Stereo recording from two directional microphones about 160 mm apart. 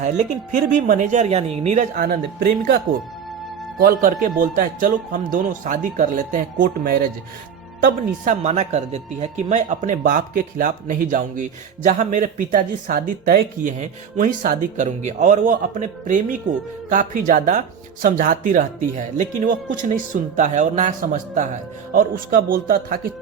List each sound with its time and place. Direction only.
0.5 s speech: 60° right (ahead or behind)
2.0 s speech: 75° right (ahead or behind)
3.8 s speech: 65° right (ahead or behind)
13.7 s speech: 45° right (ahead or behind)